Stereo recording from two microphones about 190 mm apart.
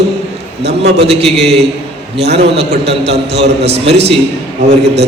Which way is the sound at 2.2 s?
60° right (ahead or behind).